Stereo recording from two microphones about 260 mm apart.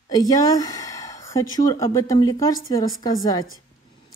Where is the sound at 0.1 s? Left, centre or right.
Centre.